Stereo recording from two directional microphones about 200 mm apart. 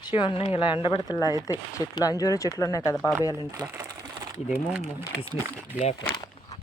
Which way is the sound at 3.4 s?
15° right (ahead or behind).